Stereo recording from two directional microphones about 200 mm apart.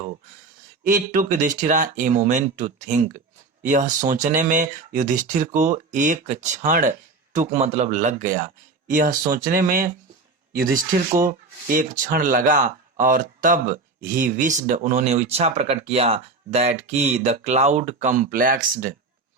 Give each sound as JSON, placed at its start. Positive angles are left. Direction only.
{"t": 0.9, "sound": "speech", "side_deg": -40}